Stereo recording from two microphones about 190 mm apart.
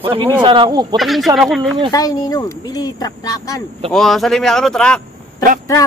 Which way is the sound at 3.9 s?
Centre (ahead or behind).